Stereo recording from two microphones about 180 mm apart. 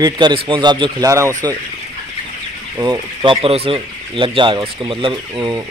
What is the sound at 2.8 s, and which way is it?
Speech, 25° right (ahead or behind).